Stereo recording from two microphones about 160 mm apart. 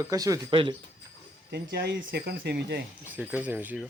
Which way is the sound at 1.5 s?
90° right.